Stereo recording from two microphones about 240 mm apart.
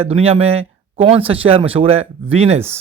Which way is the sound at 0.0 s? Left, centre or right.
Right.